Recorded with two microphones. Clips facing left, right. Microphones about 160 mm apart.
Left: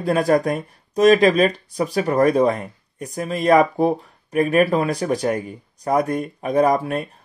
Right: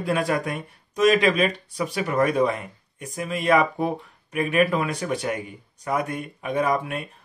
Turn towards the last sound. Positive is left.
turn(degrees=40)  # may be behind; listen again after turning